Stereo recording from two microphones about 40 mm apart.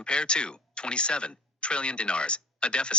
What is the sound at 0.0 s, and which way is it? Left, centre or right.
Speech, left.